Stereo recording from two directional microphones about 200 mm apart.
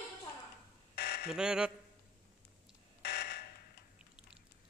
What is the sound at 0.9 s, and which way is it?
Fire alarm, 55° left (ahead or behind).